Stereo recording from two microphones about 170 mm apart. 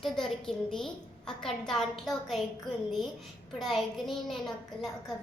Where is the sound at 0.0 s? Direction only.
Centre (ahead or behind).